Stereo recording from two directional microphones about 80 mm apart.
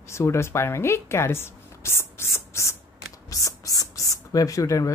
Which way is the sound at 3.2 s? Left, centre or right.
Left.